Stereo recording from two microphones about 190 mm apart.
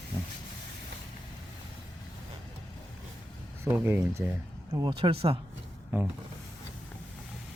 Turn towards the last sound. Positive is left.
turn(degrees=-10)  # may be behind; listen again after turning